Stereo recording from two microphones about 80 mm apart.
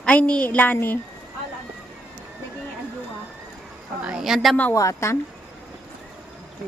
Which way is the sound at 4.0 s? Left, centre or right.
Centre.